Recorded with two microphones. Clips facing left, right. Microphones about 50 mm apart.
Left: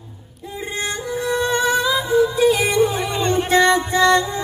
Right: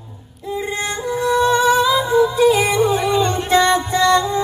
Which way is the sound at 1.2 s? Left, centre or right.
Centre.